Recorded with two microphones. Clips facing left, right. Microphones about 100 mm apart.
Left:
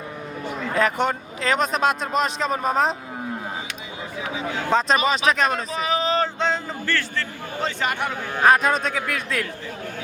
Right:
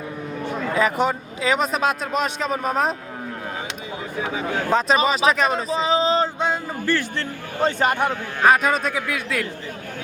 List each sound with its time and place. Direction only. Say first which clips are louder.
0.7 s a man's voice: right 1 dB; centre (ahead or behind)
4.4 s speech: right 2 dB; 45° right (ahead or behind)
4.7 s a man's voice: even; 5° right (ahead or behind)
5.2 s speech: right 2 dB; 30° right (ahead or behind)
6.2 s a sound: right 1 dB; 10° right (ahead or behind)
7.6 s speech: right 6 dB; 40° right (ahead or behind)
8.4 s a man's voice: even; centre (ahead or behind)